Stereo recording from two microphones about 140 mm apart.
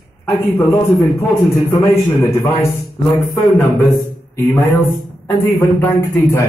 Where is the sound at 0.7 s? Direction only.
20° left (ahead or behind).